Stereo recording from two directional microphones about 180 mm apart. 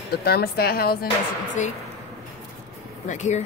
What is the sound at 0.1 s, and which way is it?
Speech, 60° left (ahead or behind).